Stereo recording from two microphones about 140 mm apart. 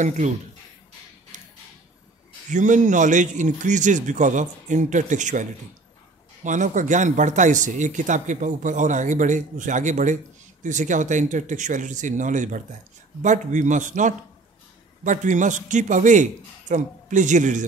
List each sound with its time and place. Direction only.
1.3 s music: 65° right (ahead or behind)
2.5 s speech: 60° right (ahead or behind)